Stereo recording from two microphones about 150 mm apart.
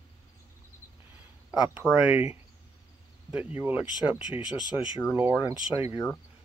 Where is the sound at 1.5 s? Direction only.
5° right (ahead or behind).